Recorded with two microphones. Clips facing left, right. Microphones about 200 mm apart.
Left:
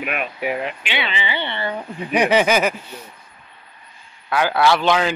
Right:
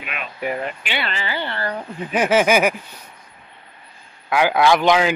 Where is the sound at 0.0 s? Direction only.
55° left (ahead or behind).